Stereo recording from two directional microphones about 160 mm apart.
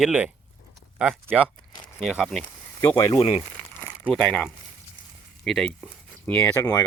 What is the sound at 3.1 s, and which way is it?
Speech, 35° left (ahead or behind).